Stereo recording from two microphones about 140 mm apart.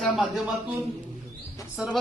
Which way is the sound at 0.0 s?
Centre (ahead or behind).